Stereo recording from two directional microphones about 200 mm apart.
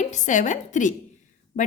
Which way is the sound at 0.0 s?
35° left (ahead or behind).